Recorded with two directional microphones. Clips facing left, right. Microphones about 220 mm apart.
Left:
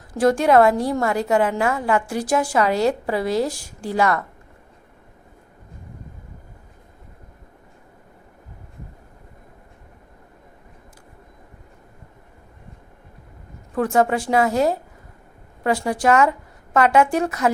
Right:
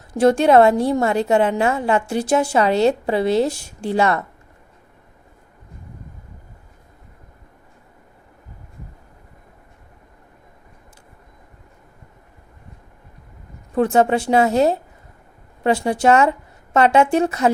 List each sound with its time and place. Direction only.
0.1 s a woman's voice: 25° right (ahead or behind)
13.7 s a woman's voice: 25° right (ahead or behind)